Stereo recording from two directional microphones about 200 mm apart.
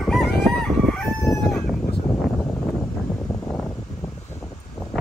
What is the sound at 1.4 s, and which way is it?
Chicken, centre (ahead or behind).